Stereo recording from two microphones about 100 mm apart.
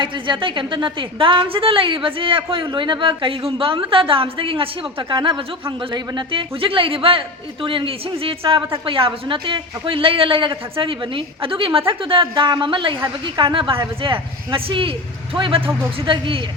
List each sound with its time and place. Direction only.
0.0 s a woman's voice: 55° right (ahead or behind)